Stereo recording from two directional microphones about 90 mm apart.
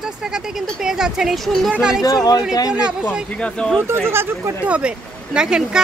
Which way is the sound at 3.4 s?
10° left (ahead or behind).